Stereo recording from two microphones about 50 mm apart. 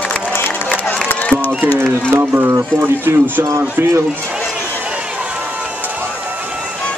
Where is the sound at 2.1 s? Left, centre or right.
Right.